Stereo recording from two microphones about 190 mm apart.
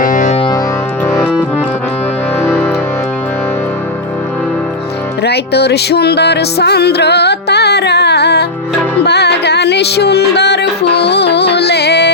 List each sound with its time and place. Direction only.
0.0 s music: 40° left (ahead or behind)
1.0 s music: 10° left (ahead or behind)
2.4 s music: 10° left (ahead or behind)
5.2 s music: 60° left (ahead or behind)